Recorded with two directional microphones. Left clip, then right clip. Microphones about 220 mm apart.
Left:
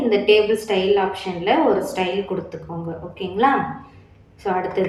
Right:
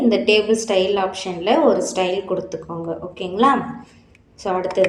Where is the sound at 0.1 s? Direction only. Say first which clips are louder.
Left 2 dB; 50° right (ahead or behind).